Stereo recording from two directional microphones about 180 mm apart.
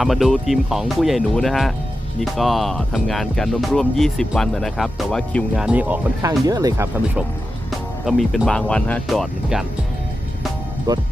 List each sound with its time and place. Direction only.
0.0 s speech: centre (ahead or behind)
6.2 s speech: 20° right (ahead or behind)
8.0 s speech: centre (ahead or behind)
10.9 s speech: 20° right (ahead or behind)